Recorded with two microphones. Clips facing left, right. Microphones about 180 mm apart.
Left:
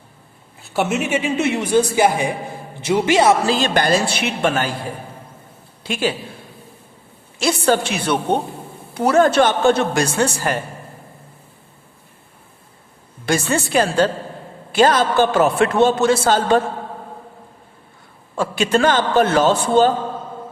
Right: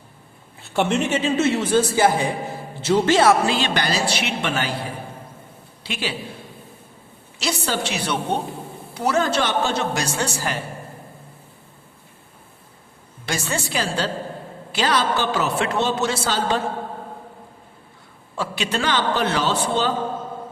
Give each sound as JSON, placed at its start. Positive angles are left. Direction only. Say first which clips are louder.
{"t": 0.6, "sound": "a woman's voice", "louder": "even", "side_deg": 5}
{"t": 3.4, "sound": "a man's voice", "louder": "left 4 dB", "side_deg": 40}
{"t": 7.3, "sound": "a man's voice", "louder": "left 8 dB", "side_deg": 50}
{"t": 13.2, "sound": "a man's voice", "louder": "left 7 dB", "side_deg": 55}
{"t": 18.3, "sound": "a man's voice", "louder": "left 7 dB", "side_deg": 50}